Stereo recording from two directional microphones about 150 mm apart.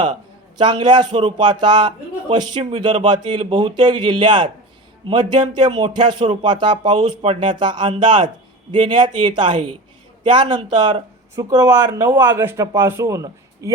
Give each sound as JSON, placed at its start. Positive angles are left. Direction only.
{"t": 0.6, "sound": "speech", "side_deg": -30}
{"t": 12.4, "sound": "a man's voice", "side_deg": -15}